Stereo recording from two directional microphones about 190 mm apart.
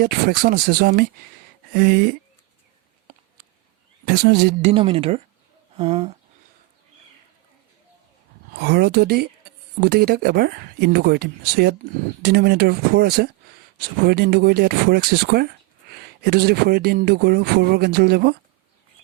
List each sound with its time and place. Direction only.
0.0 s speech: 55° right (ahead or behind)
4.0 s speech: 55° right (ahead or behind)
4.6 s speech: 30° right (ahead or behind)
8.5 s speech: 60° right (ahead or behind)